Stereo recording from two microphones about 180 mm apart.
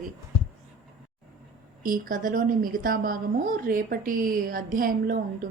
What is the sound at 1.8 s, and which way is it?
A woman's voice, 50° right (ahead or behind).